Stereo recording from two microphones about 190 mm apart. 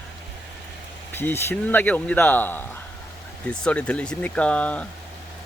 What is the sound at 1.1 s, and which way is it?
Speech, 10° left (ahead or behind).